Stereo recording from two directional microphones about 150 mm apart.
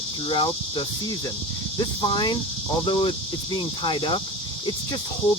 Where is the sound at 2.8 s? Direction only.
30° left (ahead or behind).